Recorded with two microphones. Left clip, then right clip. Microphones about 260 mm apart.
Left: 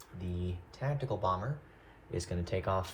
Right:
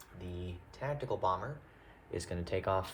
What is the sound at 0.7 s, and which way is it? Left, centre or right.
Speech, right.